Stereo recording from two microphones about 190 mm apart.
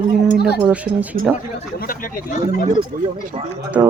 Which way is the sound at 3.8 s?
10° right (ahead or behind).